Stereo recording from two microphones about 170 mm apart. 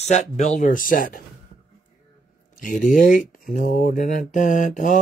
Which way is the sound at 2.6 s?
50° left (ahead or behind).